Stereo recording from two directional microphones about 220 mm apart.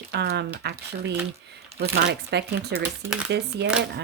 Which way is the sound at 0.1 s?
50° right (ahead or behind).